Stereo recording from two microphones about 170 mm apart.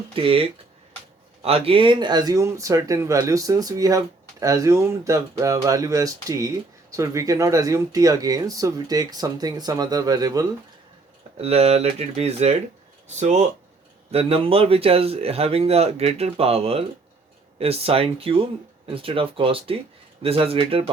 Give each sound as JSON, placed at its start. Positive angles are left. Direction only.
{"t": 0.1, "sound": "a man's voice", "side_deg": -30}
{"t": 11.3, "sound": "a man's voice", "side_deg": -35}